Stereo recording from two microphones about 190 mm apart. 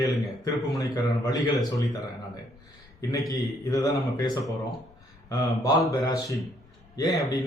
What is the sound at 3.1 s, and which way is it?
A man's voice, 20° left (ahead or behind).